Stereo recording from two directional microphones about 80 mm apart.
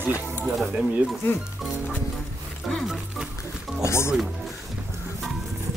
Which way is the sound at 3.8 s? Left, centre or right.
Left.